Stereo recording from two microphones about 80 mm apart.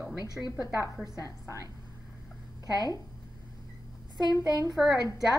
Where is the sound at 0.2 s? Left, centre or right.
Left.